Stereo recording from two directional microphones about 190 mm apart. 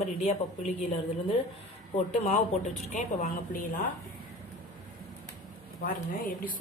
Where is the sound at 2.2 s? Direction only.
35° left (ahead or behind).